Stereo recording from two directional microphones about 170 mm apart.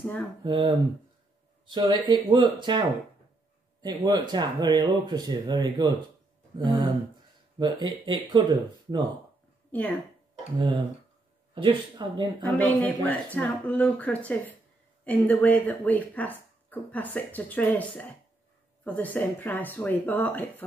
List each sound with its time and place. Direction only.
0.0 s speech: 5° left (ahead or behind)
0.4 s speech: 25° right (ahead or behind)
3.8 s speech: 25° right (ahead or behind)
9.7 s speech: 10° left (ahead or behind)
11.5 s speech: 30° right (ahead or behind)
12.5 s speech: 10° left (ahead or behind)